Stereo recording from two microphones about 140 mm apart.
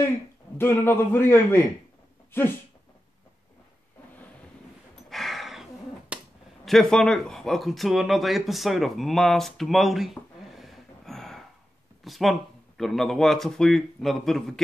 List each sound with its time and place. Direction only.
0.6 s a man's voice: 15° left (ahead or behind)
5.1 s a sound: centre (ahead or behind)
6.6 s speech: centre (ahead or behind)